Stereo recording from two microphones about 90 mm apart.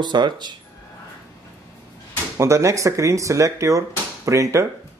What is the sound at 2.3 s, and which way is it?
Speech, 35° right (ahead or behind).